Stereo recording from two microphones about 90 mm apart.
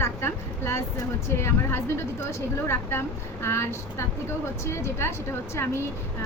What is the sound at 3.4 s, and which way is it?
A woman's voice, 30° left (ahead or behind).